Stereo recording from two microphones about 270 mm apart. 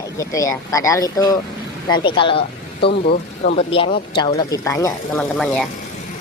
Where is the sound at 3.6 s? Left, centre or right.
Centre.